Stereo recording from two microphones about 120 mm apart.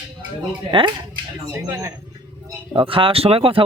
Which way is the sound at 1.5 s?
25° right (ahead or behind).